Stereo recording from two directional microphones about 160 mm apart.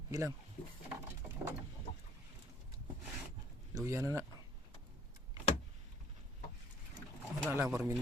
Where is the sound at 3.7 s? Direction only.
20° right (ahead or behind).